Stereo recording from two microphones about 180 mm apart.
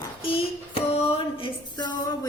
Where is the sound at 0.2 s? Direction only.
30° left (ahead or behind).